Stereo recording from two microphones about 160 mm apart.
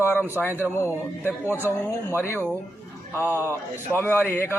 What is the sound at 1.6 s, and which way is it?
Speech, 15° left (ahead or behind).